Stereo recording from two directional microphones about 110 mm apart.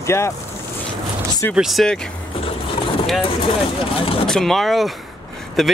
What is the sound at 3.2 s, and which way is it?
Speech, 55° left (ahead or behind).